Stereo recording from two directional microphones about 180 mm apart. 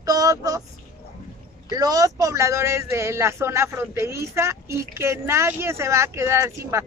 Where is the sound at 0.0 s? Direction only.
20° right (ahead or behind).